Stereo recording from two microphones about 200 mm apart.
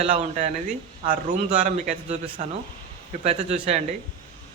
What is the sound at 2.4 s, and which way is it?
Speech, 35° right (ahead or behind).